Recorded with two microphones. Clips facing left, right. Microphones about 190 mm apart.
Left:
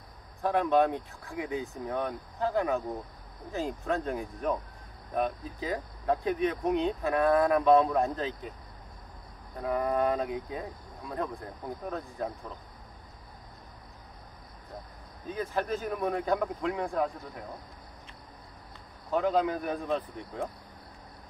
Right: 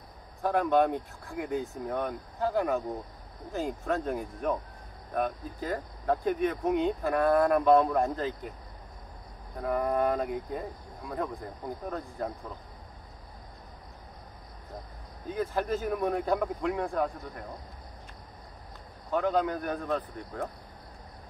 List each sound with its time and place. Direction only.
0.4 s speech: centre (ahead or behind)
9.6 s speech: centre (ahead or behind)
15.2 s speech: centre (ahead or behind)
19.1 s speech: centre (ahead or behind)